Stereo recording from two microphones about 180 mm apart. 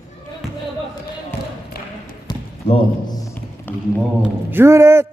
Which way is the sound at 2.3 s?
25° left (ahead or behind).